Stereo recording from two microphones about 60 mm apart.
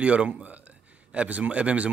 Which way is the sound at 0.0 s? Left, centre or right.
Centre.